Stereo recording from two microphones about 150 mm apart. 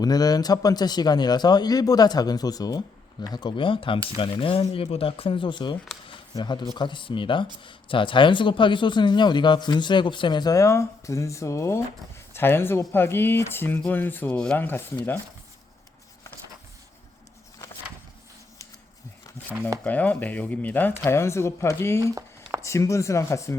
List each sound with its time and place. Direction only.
0.0 s speech: 25° left (ahead or behind)
6.1 s camera: 30° left (ahead or behind)
6.7 s speech: 30° left (ahead or behind); by 14.8 s 10° left (ahead or behind)
19.8 s speech: 10° left (ahead or behind)